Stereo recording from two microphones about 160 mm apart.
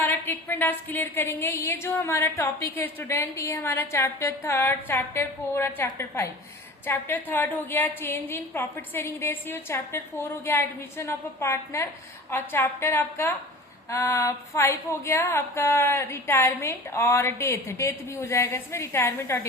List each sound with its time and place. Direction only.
0.0 s a woman's voice: 15° left (ahead or behind)